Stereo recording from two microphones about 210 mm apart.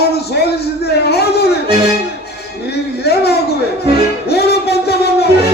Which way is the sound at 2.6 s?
50° left (ahead or behind).